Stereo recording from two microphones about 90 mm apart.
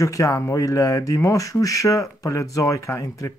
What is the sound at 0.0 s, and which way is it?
Speech, 40° left (ahead or behind).